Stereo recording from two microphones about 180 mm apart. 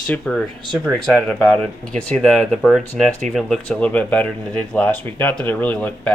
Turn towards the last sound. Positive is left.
turn(degrees=5)  # may be behind; listen again after turning